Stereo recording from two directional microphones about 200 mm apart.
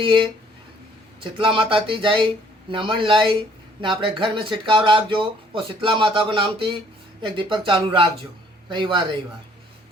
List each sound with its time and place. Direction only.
0.0 s speech: 25° right (ahead or behind)